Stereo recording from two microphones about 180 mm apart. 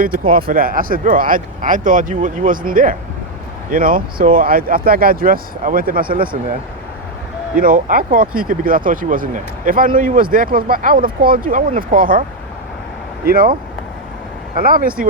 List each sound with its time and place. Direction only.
0.0 s speech: 50° right (ahead or behind)
7.6 s speech: 50° right (ahead or behind)
13.2 s speech: 55° right (ahead or behind)